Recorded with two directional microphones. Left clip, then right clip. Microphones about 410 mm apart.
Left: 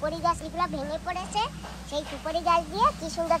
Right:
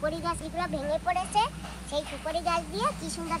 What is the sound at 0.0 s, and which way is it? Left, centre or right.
Speech, centre.